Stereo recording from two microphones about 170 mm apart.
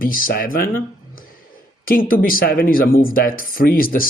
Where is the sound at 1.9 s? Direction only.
60° left (ahead or behind).